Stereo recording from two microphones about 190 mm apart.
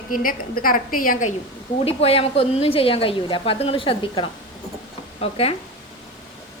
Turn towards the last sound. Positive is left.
turn(degrees=30)  # may be behind; listen again after turning